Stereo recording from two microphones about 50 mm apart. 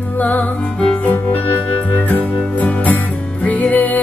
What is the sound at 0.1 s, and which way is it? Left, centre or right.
Music, left.